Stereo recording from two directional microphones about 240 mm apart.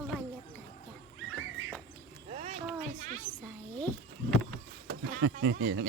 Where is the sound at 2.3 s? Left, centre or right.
Right.